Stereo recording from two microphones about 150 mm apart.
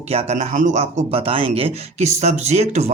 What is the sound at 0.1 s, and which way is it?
Speech, 45° right (ahead or behind).